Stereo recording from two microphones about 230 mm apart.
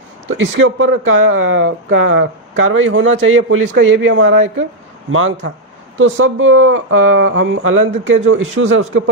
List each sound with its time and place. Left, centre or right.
0.3 s speech: right